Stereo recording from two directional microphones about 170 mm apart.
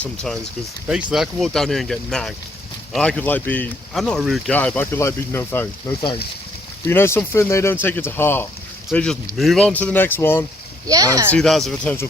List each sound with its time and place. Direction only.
0.0 s speech: 5° left (ahead or behind)
6.8 s speech: 15° left (ahead or behind)
10.8 s speech: 20° right (ahead or behind)
11.3 s speech: centre (ahead or behind)